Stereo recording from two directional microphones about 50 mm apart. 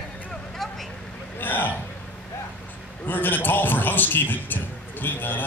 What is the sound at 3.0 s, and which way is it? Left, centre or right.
A man's voice, left.